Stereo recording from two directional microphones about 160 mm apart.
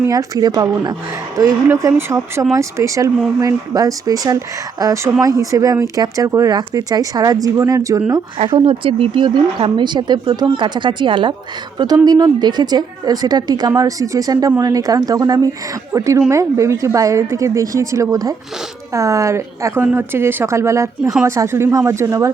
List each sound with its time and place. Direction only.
0.0 s speech: 20° right (ahead or behind)
8.4 s a woman's voice: 30° right (ahead or behind)